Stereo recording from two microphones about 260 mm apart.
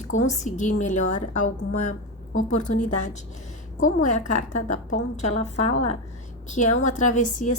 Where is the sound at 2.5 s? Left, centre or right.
Left.